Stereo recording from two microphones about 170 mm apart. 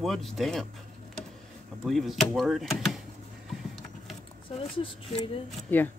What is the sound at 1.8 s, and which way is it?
Speech, centre (ahead or behind).